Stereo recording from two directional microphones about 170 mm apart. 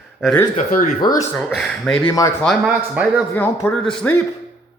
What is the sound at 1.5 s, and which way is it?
Speech, centre (ahead or behind).